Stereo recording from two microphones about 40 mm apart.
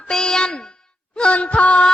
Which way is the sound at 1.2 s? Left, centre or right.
Left.